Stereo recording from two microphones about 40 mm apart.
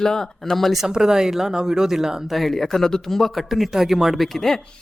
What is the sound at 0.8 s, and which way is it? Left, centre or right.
Speech, centre.